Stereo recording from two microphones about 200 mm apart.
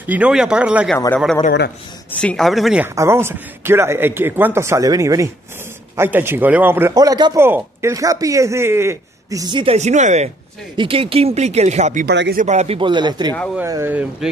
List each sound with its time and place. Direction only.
0.0 s speech: 5° right (ahead or behind)
0.9 s a man's voice: 10° left (ahead or behind); by 12.1 s 35° right (ahead or behind)
12.1 s speech: 55° right (ahead or behind)
12.4 s speech: 35° right (ahead or behind)
13.6 s speech: 10° right (ahead or behind)